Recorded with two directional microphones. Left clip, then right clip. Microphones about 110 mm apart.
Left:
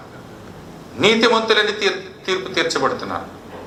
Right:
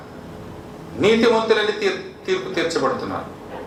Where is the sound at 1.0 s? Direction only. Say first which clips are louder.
Left 1 dB; 40° left (ahead or behind).